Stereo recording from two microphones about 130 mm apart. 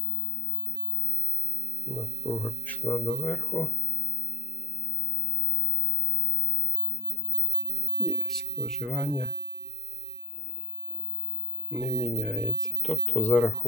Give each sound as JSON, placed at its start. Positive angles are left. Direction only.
{"t": 1.9, "sound": "speech", "side_deg": 0}
{"t": 2.3, "sound": "speech", "side_deg": 10}
{"t": 8.0, "sound": "speech", "side_deg": 0}
{"t": 11.7, "sound": "speech", "side_deg": 0}